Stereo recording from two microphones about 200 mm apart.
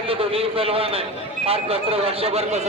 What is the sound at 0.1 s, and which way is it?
A man's voice, 30° right (ahead or behind).